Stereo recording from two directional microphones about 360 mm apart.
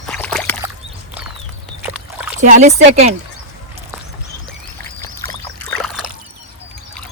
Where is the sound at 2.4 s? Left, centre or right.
Centre.